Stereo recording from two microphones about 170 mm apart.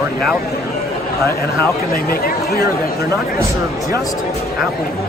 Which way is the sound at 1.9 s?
60° left (ahead or behind).